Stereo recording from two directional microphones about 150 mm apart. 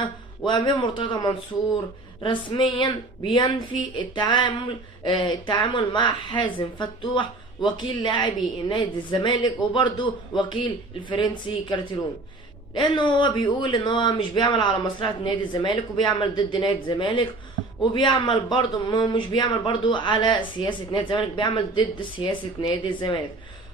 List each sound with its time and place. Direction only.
0.0 s a woman's voice: 30° left (ahead or behind)